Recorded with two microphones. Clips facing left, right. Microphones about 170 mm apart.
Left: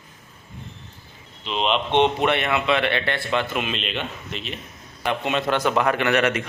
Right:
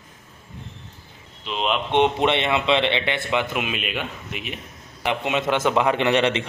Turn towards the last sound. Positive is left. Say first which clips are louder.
# right 1 dB
turn(degrees=-25)  # may be behind; listen again after turning